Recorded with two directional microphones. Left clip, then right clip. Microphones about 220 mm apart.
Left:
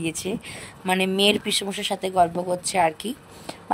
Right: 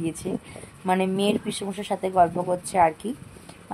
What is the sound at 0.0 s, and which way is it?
Speech, 45° left (ahead or behind).